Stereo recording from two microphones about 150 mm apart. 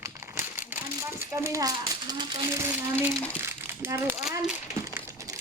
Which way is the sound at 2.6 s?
15° right (ahead or behind).